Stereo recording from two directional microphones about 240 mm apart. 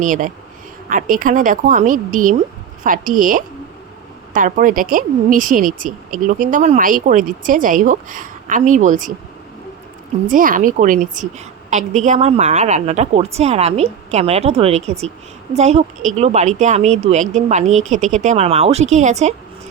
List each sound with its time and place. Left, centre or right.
0.0 s speech: right
10.2 s a woman's voice: right